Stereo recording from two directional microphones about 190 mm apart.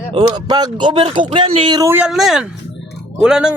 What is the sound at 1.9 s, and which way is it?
Speech, 5° right (ahead or behind).